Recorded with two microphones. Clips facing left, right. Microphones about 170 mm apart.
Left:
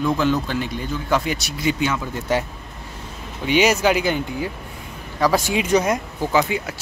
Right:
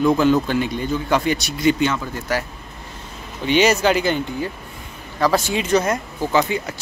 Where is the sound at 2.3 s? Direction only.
25° left (ahead or behind).